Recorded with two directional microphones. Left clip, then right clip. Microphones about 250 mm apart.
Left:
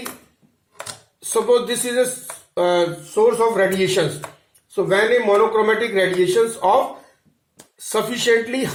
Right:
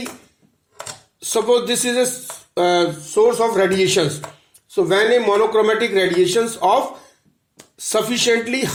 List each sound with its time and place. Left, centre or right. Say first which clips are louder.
1.2 s speech: even; right
7.9 s speech: right 1 dB; right